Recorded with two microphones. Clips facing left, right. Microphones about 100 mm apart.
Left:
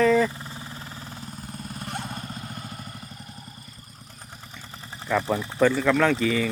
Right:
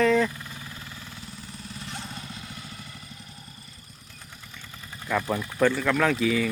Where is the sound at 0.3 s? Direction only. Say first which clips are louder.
Left 2 dB; 30° left (ahead or behind).